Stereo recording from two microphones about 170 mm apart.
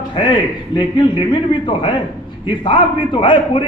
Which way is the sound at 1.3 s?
30° left (ahead or behind).